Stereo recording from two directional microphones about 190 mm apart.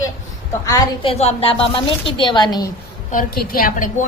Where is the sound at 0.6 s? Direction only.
20° left (ahead or behind).